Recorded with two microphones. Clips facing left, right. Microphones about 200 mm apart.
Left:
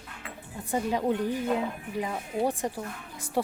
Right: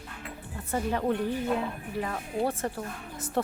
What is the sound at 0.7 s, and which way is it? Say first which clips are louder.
A woman's voice: left 1 dB; 15° left (ahead or behind).